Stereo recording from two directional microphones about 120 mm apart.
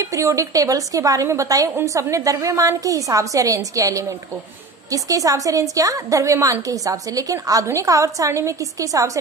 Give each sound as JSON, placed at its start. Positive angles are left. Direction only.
{"t": 0.0, "sound": "a woman's voice", "side_deg": -25}